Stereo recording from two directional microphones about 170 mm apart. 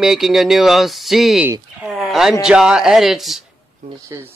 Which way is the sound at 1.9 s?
Centre (ahead or behind).